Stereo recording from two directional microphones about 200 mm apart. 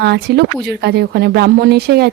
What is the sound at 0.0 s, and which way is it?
A woman's voice, 55° right (ahead or behind).